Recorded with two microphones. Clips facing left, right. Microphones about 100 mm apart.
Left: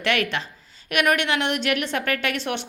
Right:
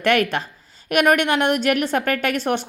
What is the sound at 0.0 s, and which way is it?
A woman's voice, 45° right (ahead or behind).